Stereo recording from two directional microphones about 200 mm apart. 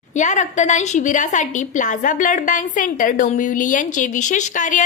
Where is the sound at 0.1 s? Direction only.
35° left (ahead or behind).